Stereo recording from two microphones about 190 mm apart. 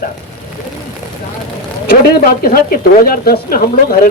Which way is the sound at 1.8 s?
50° left (ahead or behind).